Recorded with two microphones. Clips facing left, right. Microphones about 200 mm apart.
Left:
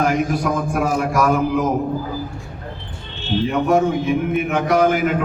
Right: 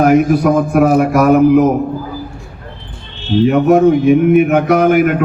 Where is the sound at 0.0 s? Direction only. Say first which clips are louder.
Right 9 dB; 55° right (ahead or behind).